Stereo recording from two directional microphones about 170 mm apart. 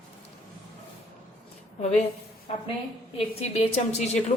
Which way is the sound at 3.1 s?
40° left (ahead or behind).